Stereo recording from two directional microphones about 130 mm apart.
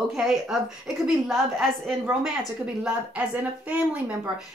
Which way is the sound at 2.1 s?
5° right (ahead or behind).